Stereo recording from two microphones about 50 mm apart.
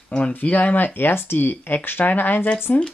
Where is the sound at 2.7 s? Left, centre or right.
Left.